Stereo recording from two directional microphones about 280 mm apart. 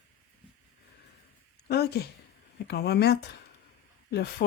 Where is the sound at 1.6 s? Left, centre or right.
Left.